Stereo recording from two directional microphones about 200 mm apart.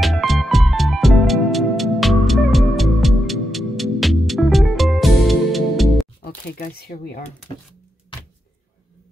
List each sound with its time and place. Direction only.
0.0 s music: centre (ahead or behind)
6.2 s speech: 50° left (ahead or behind)